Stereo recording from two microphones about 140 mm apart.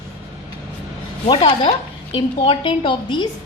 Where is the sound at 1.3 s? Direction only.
35° left (ahead or behind).